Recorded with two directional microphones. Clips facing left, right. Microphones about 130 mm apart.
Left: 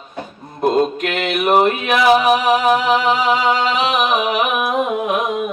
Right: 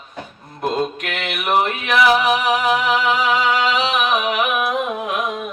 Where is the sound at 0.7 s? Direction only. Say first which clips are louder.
Left 5 dB; 25° left (ahead or behind).